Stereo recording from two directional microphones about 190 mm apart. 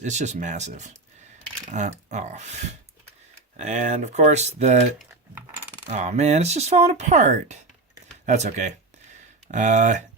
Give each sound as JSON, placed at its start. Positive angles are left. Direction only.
{"t": 0.0, "sound": "speech", "side_deg": -40}